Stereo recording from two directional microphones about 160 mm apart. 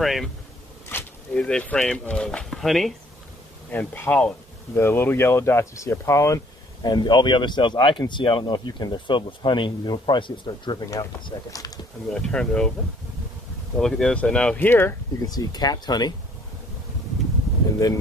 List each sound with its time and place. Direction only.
0.0 s speech: centre (ahead or behind)
0.8 s speech: 10° left (ahead or behind)
3.7 s speech: 10° left (ahead or behind)
12.1 s speech: 5° left (ahead or behind)
13.7 s speech: 5° left (ahead or behind)
15.2 s speech: 25° left (ahead or behind)